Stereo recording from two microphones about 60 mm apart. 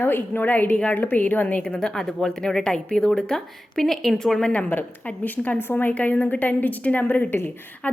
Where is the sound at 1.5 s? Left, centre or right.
Centre.